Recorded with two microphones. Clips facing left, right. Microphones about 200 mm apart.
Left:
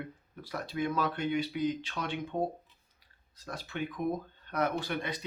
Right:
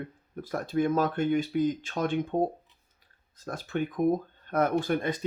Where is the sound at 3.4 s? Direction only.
50° right (ahead or behind).